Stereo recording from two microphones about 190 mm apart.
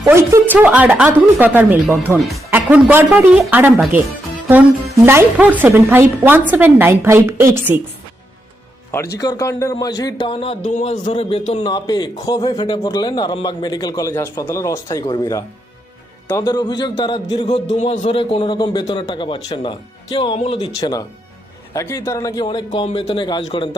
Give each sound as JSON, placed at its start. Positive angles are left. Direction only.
{"t": 0.0, "sound": "speech", "side_deg": -15}
{"t": 5.0, "sound": "speech", "side_deg": -10}
{"t": 9.1, "sound": "a man's voice", "side_deg": 15}
{"t": 11.6, "sound": "a man's voice", "side_deg": 20}
{"t": 17.7, "sound": "a man's voice", "side_deg": 40}